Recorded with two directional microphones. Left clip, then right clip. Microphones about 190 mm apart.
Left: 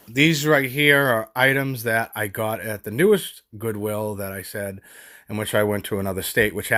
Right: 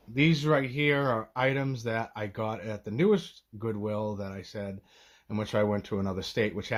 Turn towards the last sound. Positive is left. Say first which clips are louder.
# left 9 dB
turn(degrees=30)  # may be behind; listen again after turning